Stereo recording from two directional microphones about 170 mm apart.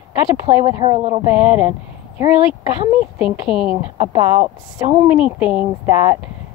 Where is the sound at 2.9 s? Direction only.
5° right (ahead or behind).